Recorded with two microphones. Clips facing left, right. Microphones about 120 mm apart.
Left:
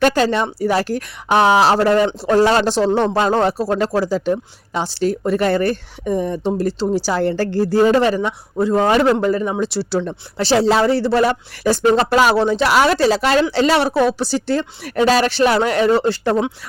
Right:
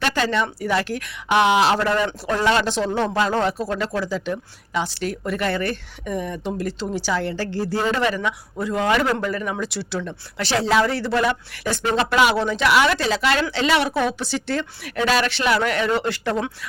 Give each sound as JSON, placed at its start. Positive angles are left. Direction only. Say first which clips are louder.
{"t": 0.0, "sound": "speech", "louder": "left 6 dB", "side_deg": 40}